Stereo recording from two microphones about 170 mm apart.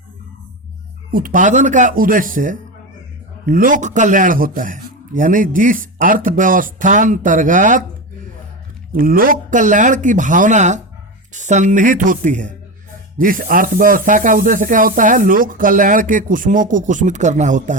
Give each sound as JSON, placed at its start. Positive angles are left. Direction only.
{"t": 1.1, "sound": "speech", "side_deg": -55}
{"t": 9.0, "sound": "speech", "side_deg": -55}